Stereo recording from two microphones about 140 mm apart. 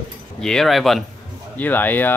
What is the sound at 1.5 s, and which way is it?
Speech, 15° left (ahead or behind).